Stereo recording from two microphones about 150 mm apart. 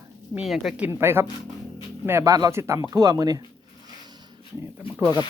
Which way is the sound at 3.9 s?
25° right (ahead or behind).